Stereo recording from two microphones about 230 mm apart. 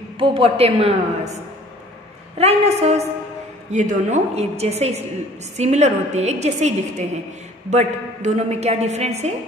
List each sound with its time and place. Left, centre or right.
0.2 s a woman's voice: right